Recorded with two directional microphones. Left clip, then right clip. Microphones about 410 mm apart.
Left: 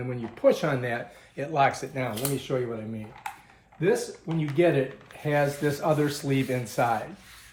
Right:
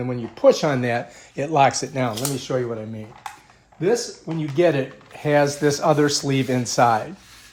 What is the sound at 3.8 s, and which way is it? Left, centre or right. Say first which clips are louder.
Speech: right 4 dB; centre.